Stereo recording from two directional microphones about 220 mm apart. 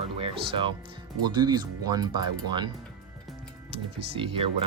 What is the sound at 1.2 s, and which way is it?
Speech, 20° right (ahead or behind).